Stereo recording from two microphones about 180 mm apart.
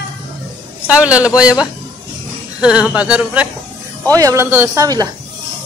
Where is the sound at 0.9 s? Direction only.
5° right (ahead or behind).